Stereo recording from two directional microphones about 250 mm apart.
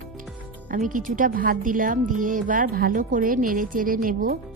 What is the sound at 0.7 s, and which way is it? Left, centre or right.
Speech, right.